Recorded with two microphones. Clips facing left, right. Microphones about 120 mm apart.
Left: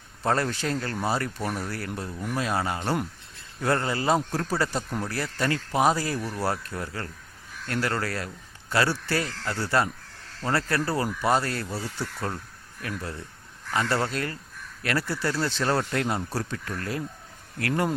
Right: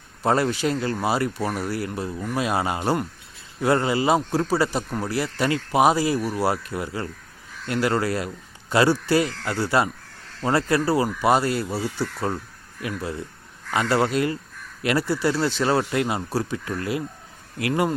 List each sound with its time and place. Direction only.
0.2 s speech: 10° right (ahead or behind)
13.7 s speech: 15° right (ahead or behind)